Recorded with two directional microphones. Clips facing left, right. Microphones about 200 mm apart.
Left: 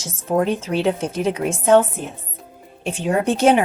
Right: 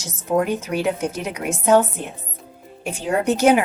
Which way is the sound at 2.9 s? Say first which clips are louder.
Left 1 dB; 30° left (ahead or behind).